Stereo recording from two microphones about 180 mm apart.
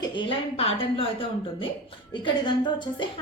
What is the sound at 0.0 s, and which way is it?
A woman's voice, 25° left (ahead or behind).